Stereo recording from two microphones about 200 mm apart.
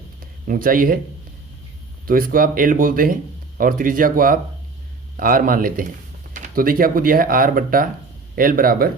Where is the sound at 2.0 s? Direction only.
45° right (ahead or behind).